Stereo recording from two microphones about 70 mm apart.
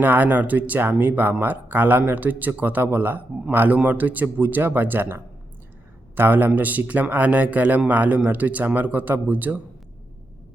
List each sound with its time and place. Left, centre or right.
0.0 s speech: right